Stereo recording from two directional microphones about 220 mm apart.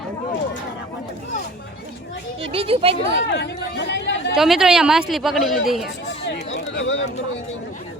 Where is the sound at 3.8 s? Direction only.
55° left (ahead or behind).